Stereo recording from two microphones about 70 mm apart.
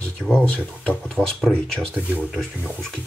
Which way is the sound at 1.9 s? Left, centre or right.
Centre.